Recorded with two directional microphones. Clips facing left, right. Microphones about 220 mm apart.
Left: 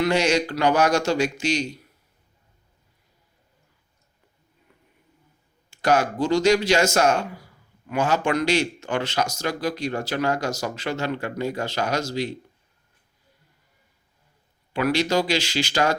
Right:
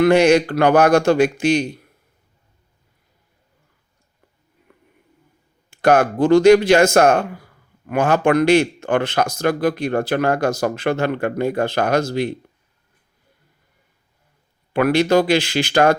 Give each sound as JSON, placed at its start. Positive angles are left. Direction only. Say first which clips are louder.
{"t": 0.0, "sound": "speech", "louder": "right 8 dB", "side_deg": -55}
{"t": 4.7, "sound": "a sound", "louder": "right 7 dB", "side_deg": -55}
{"t": 5.7, "sound": "speech", "louder": "right 6 dB", "side_deg": -55}
{"t": 14.7, "sound": "speech", "louder": "right 7 dB", "side_deg": -55}